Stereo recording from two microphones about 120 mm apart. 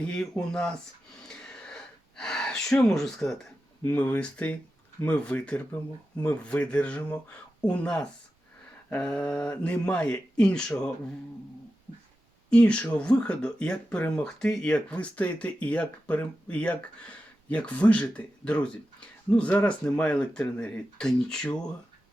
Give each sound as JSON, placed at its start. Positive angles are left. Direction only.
{"t": 0.1, "sound": "speech", "side_deg": 5}
{"t": 1.3, "sound": "gasp", "side_deg": 5}
{"t": 2.9, "sound": "speech", "side_deg": 5}
{"t": 12.5, "sound": "speech", "side_deg": 10}